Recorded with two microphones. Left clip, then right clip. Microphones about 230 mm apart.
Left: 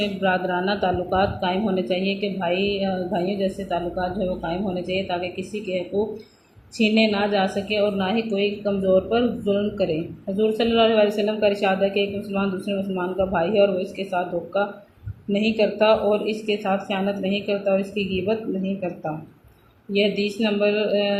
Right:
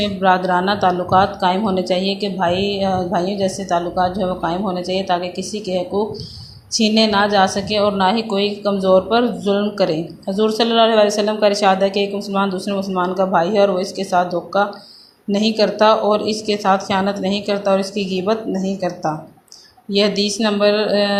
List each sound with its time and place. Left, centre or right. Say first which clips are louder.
0.0 s a woman's voice: right 7 dB; centre
19.9 s a woman's voice: right 5 dB; right